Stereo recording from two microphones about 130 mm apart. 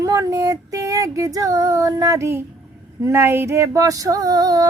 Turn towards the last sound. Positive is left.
turn(degrees=-30)  # may be behind; listen again after turning